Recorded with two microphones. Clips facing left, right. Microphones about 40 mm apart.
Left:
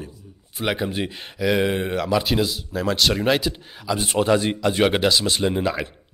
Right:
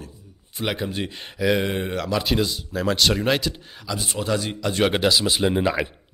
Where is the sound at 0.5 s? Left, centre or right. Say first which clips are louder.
Left 2 dB; centre.